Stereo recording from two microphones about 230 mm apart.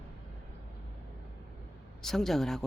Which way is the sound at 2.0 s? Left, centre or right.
Centre.